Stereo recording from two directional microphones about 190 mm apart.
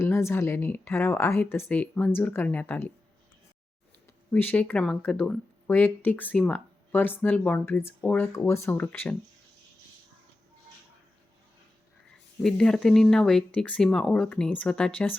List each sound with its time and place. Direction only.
0.0 s speech: 15° left (ahead or behind)
4.3 s speech: 10° left (ahead or behind)
12.4 s speech: 5° left (ahead or behind)